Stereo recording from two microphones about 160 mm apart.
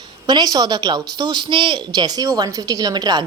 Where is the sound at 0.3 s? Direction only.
25° right (ahead or behind).